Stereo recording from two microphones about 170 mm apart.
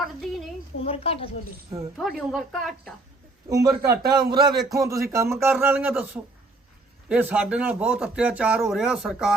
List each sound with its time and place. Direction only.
0.0 s a sound: centre (ahead or behind)
0.8 s a woman's voice: 35° left (ahead or behind)
2.0 s speech: centre (ahead or behind)
3.8 s a man's voice: 65° right (ahead or behind)
4.3 s speech: 25° right (ahead or behind); by 6.1 s 10° right (ahead or behind)
7.1 s speech: 10° right (ahead or behind)